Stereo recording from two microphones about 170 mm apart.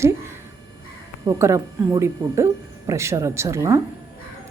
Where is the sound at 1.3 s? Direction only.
15° right (ahead or behind).